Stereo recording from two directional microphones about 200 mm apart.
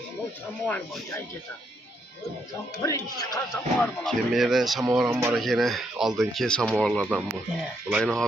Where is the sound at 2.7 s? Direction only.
15° left (ahead or behind).